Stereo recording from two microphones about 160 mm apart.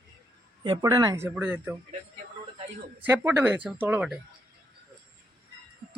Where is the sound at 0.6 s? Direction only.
25° right (ahead or behind).